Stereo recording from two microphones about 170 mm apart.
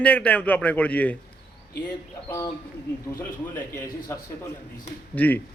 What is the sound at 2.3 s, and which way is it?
A man's voice, 20° left (ahead or behind).